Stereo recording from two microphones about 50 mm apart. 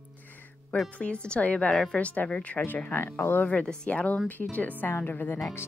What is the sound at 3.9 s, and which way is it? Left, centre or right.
Speech, left.